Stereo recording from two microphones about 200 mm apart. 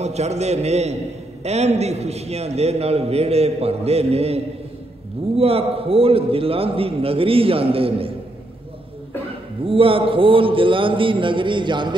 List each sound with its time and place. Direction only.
0.0 s a man's voice: 35° right (ahead or behind)
9.7 s a man's voice: 25° right (ahead or behind)